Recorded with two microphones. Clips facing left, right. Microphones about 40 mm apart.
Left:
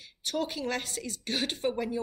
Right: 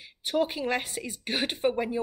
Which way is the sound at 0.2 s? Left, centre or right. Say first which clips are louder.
Right 5 dB; centre.